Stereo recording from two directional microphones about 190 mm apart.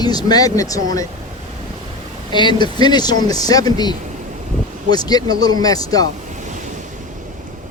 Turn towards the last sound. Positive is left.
turn(degrees=20)  # may be behind; listen again after turning